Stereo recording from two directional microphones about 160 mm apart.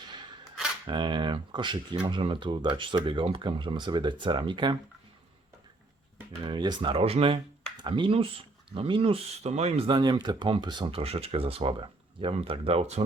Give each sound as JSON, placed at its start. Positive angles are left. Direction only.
{"t": 0.9, "sound": "speech", "side_deg": -30}
{"t": 6.4, "sound": "speech", "side_deg": -30}